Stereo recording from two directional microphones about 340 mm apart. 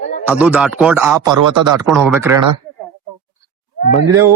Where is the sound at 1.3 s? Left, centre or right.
Right.